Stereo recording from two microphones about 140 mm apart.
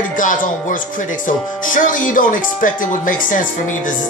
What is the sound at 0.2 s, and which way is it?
Speech, 70° left (ahead or behind).